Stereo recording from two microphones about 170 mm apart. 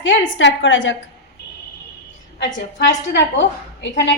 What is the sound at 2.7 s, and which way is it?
A woman's voice, 90° left.